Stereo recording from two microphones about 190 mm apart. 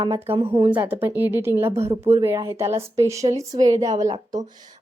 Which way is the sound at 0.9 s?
10° right (ahead or behind).